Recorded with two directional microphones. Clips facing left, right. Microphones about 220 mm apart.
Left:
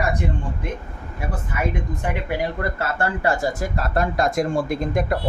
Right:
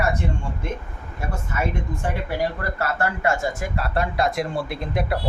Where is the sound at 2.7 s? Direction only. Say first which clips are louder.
Left 1 dB; 25° left (ahead or behind).